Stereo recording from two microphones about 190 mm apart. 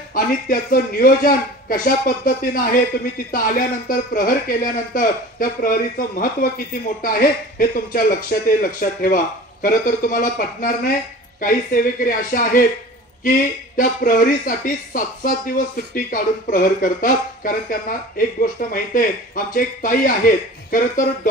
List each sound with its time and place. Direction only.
0.1 s speech: 50° left (ahead or behind)